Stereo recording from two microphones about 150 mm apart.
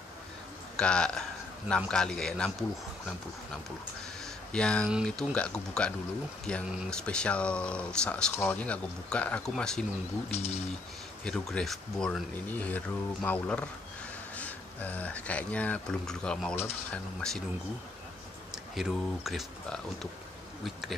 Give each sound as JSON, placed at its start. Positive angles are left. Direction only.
{"t": 0.7, "sound": "speech", "side_deg": 5}
{"t": 4.2, "sound": "a sound", "side_deg": 5}
{"t": 5.0, "sound": "speech", "side_deg": 5}
{"t": 10.3, "sound": "speech", "side_deg": 45}
{"t": 11.2, "sound": "speech", "side_deg": 5}
{"t": 18.5, "sound": "speech", "side_deg": 0}